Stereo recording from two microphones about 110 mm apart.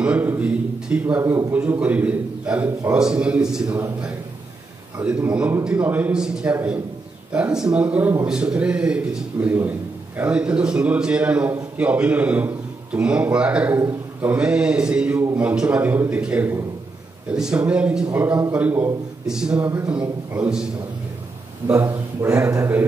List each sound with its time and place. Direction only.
0.0 s a man's voice: 15° right (ahead or behind)
1.2 s a man's voice: 25° right (ahead or behind)
1.5 s a man's voice: 15° right (ahead or behind)
5.0 s a man's voice: 10° right (ahead or behind)
21.6 s a man's voice: 25° right (ahead or behind)